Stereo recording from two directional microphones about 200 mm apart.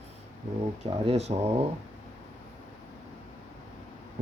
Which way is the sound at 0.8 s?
35° right (ahead or behind).